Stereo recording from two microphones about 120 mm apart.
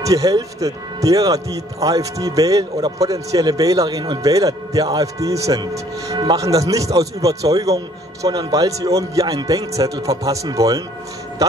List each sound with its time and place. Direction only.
0.0 s speech: 30° right (ahead or behind)